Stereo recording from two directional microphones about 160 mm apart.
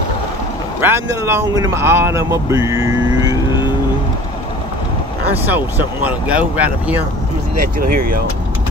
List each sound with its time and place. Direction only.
0.7 s speech: 15° right (ahead or behind)
5.4 s speech: 10° right (ahead or behind)
7.6 s speech: 65° right (ahead or behind)